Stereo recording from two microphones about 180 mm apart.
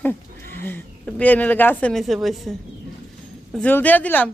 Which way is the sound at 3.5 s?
10° left (ahead or behind).